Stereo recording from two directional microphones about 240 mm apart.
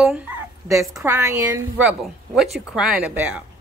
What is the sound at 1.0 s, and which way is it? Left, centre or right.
Speech, centre.